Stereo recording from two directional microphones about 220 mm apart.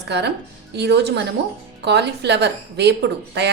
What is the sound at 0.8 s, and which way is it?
A woman's voice, 50° right (ahead or behind).